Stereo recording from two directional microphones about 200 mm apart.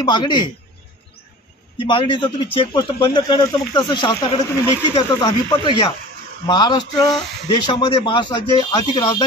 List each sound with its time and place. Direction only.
0.0 s speech: 20° left (ahead or behind)
1.8 s speech: 25° left (ahead or behind)